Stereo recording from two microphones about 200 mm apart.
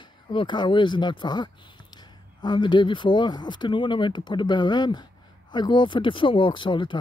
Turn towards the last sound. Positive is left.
turn(degrees=25)  # may be behind; listen again after turning